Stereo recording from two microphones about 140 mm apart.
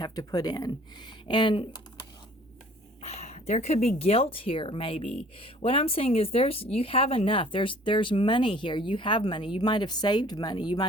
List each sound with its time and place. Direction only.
0.0 s speech: 30° left (ahead or behind)
3.0 s a sound: 50° left (ahead or behind)
3.8 s speech: 45° left (ahead or behind)